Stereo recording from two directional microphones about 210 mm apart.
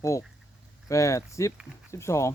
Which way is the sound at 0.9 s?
15° left (ahead or behind).